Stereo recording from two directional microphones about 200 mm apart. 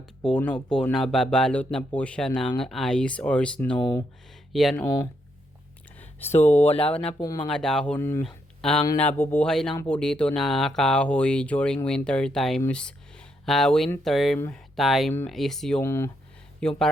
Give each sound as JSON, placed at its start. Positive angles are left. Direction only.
{"t": 0.2, "sound": "speech", "side_deg": 5}
{"t": 6.0, "sound": "a sound", "side_deg": 10}
{"t": 6.7, "sound": "speech", "side_deg": 5}
{"t": 7.2, "sound": "speech", "side_deg": 20}
{"t": 7.4, "sound": "speech", "side_deg": 5}
{"t": 14.3, "sound": "speech", "side_deg": 10}
{"t": 14.8, "sound": "speech", "side_deg": 0}
{"t": 15.8, "sound": "speech", "side_deg": 15}